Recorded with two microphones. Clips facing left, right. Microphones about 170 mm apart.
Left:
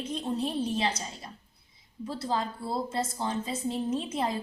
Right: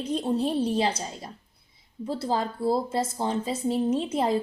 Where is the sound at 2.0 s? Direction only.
30° right (ahead or behind).